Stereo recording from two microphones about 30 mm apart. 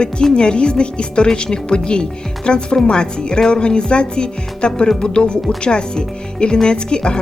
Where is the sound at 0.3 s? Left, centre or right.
Left.